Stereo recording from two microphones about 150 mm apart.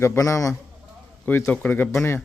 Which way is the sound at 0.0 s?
20° left (ahead or behind).